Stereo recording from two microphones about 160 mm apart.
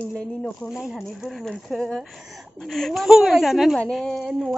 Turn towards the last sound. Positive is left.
turn(degrees=5)  # may be behind; listen again after turning